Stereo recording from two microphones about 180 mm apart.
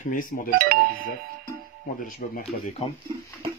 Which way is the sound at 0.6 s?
55° right (ahead or behind).